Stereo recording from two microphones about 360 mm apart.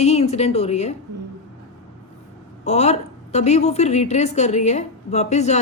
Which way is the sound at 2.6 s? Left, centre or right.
Centre.